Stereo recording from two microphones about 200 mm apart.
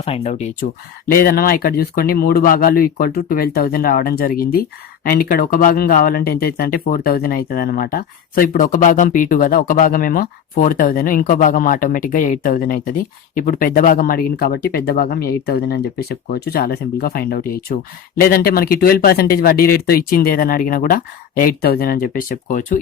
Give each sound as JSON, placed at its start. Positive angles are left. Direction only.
{"t": 0.0, "sound": "speech", "side_deg": 35}
{"t": 1.1, "sound": "speech", "side_deg": 45}